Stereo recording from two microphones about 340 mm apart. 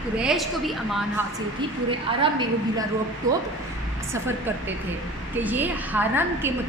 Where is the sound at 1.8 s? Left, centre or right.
Centre.